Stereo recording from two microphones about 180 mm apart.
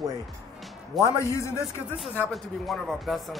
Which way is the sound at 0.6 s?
Centre (ahead or behind).